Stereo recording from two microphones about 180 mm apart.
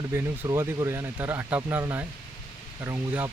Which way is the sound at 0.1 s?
15° right (ahead or behind).